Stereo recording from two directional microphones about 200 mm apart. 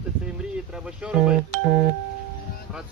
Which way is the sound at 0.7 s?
5° right (ahead or behind).